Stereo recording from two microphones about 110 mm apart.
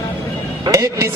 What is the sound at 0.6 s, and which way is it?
Speech, 30° right (ahead or behind).